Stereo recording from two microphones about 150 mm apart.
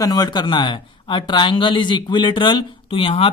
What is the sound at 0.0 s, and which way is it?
Speech, 25° left (ahead or behind).